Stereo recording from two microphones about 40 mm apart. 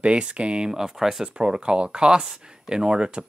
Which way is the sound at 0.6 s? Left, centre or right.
Centre.